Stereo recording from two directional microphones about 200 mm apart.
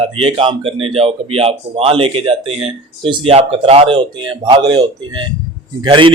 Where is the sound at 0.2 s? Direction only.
25° right (ahead or behind).